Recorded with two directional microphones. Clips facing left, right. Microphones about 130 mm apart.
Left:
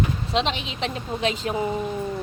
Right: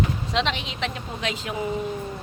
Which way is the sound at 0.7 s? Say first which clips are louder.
Left 2 dB; 30° left (ahead or behind).